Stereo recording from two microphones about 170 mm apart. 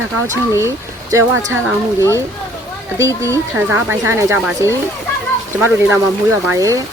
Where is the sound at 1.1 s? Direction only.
20° right (ahead or behind).